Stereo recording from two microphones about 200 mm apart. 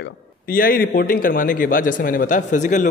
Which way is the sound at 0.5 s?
45° left (ahead or behind).